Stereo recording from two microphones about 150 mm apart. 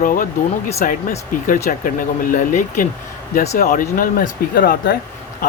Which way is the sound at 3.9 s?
70° left (ahead or behind).